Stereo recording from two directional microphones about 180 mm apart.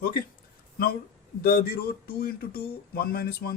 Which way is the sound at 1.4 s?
60° left (ahead or behind).